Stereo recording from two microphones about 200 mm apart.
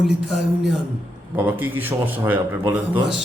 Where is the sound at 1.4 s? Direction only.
10° right (ahead or behind).